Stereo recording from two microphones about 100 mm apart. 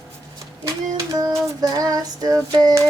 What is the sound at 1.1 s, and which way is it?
A woman's voice, 35° right (ahead or behind).